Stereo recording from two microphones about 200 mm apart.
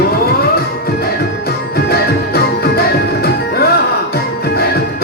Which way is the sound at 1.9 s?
50° left (ahead or behind).